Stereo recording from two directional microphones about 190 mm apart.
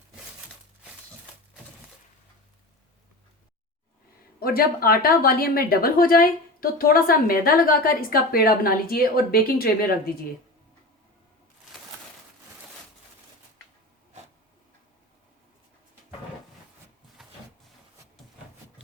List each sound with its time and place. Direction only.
4.4 s a woman's voice: 50° left (ahead or behind)